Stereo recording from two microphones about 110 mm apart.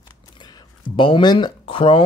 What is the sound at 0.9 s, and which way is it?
Speech, 50° left (ahead or behind).